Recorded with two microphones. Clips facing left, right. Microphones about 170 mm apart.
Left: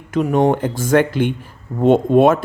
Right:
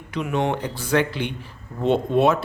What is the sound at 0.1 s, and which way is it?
Speech, 45° left (ahead or behind).